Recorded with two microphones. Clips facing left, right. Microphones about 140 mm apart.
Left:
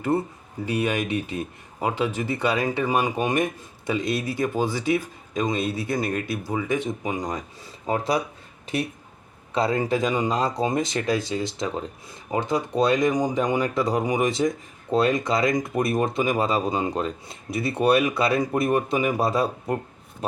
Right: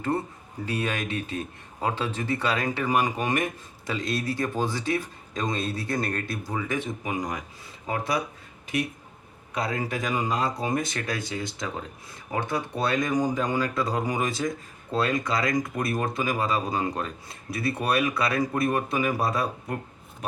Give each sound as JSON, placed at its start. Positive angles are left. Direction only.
{"t": 0.6, "sound": "speech", "side_deg": 15}
{"t": 9.6, "sound": "speech", "side_deg": 25}